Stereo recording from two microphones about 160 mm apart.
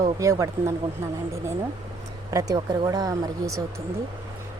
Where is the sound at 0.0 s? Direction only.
20° right (ahead or behind).